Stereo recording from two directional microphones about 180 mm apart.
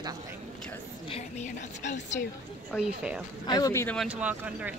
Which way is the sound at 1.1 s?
40° left (ahead or behind).